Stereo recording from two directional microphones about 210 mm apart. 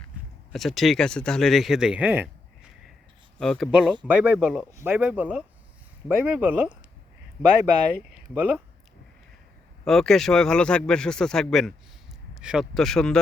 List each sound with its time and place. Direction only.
0.5 s speech: centre (ahead or behind)
3.3 s speech: 5° left (ahead or behind)
8.1 s speech: 5° right (ahead or behind)
9.8 s speech: centre (ahead or behind)